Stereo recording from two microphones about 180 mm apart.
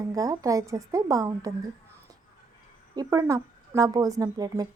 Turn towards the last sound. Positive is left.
turn(degrees=-20)  # may be behind; listen again after turning